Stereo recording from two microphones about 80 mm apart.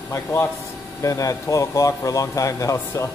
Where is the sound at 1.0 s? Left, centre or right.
Left.